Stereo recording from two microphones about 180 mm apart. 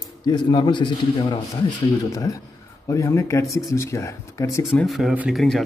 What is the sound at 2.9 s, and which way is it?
A man's voice, 15° left (ahead or behind).